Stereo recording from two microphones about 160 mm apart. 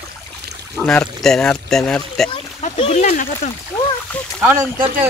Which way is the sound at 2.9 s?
50° left (ahead or behind).